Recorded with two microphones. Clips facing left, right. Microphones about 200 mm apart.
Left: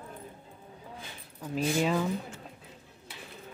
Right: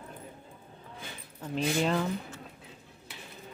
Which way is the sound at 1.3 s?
5° left (ahead or behind).